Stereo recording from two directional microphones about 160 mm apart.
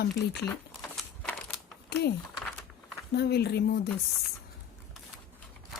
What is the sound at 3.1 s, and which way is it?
Speech, 90° left.